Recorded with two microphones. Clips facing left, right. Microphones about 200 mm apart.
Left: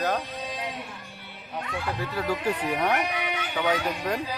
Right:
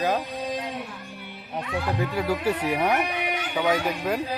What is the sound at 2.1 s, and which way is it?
Speech, 10° right (ahead or behind).